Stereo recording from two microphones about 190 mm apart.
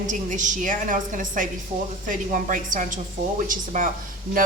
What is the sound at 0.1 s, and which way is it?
A woman's voice, 40° right (ahead or behind).